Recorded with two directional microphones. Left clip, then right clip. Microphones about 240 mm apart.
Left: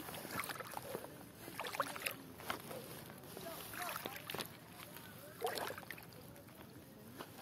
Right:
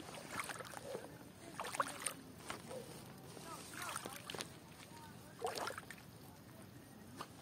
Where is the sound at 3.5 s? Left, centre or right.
Left.